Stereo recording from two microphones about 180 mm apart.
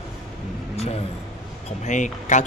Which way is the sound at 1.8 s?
45° left (ahead or behind).